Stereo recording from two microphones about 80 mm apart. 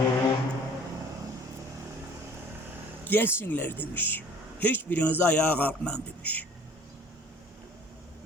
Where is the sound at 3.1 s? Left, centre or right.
Left.